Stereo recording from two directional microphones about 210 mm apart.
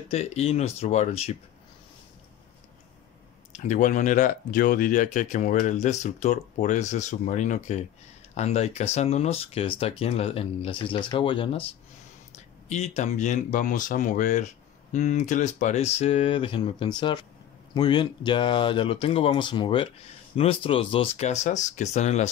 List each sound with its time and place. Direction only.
0.1 s speech: 30° left (ahead or behind)
3.5 s speech: 35° left (ahead or behind)